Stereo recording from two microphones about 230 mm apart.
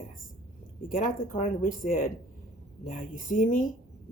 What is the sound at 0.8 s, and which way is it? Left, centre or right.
Speech, left.